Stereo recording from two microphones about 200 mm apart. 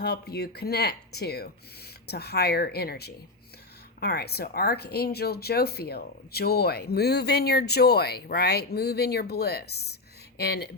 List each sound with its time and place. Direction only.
0.0 s speech: 55° left (ahead or behind)